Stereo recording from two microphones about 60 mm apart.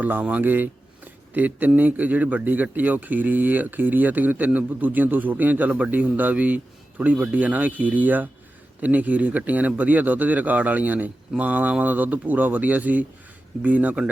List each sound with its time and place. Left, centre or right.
0.0 s a man's voice: right